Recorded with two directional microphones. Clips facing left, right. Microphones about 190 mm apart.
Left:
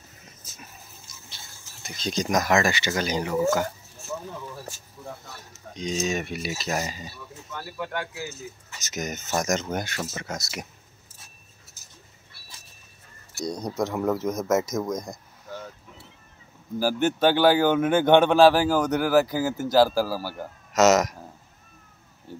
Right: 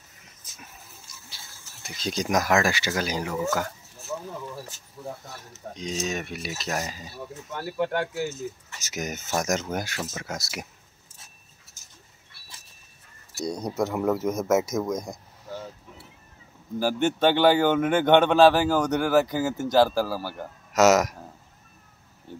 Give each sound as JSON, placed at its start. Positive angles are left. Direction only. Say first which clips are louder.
{"t": 1.3, "sound": "speech", "louder": "left 1 dB", "side_deg": -5}
{"t": 3.3, "sound": "a man's voice", "louder": "left 6 dB", "side_deg": 5}
{"t": 4.1, "sound": "speech", "louder": "right 1 dB", "side_deg": -5}
{"t": 5.5, "sound": "speech", "louder": "left 3 dB", "side_deg": -5}
{"t": 7.5, "sound": "speech", "louder": "right 5 dB", "side_deg": -50}
{"t": 8.8, "sound": "speech", "louder": "even", "side_deg": -5}
{"t": 13.5, "sound": "speech", "louder": "right 1 dB", "side_deg": -5}
{"t": 16.7, "sound": "a man's voice", "louder": "left 1 dB", "side_deg": 5}
{"t": 20.7, "sound": "speech", "louder": "even", "side_deg": -10}